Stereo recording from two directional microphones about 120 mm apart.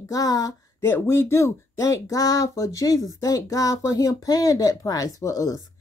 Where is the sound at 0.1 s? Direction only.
30° left (ahead or behind).